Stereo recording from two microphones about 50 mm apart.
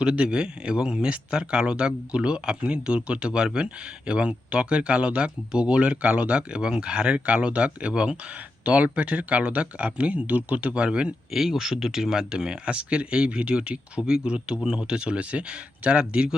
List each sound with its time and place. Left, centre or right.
0.0 s speech: centre
11.3 s speech: centre; by 16.3 s right